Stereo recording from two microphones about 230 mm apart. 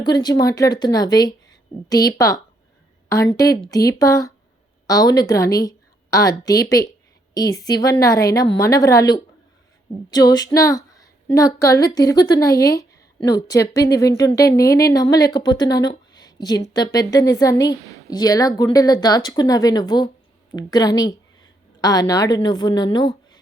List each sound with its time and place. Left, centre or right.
0.0 s a woman's voice: centre